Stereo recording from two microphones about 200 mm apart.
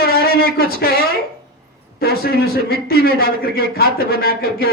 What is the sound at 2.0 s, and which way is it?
Speech, 50° left (ahead or behind).